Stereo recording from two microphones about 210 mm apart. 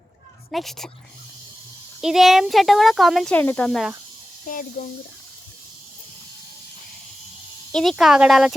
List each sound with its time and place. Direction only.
0.5 s speech: centre (ahead or behind)
2.0 s speech: centre (ahead or behind)
4.4 s speech: 40° left (ahead or behind)
7.7 s speech: centre (ahead or behind)